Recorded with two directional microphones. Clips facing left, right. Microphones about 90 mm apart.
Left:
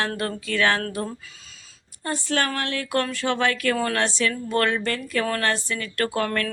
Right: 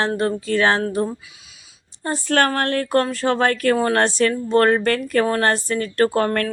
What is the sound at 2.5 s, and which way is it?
Speech, 45° right (ahead or behind).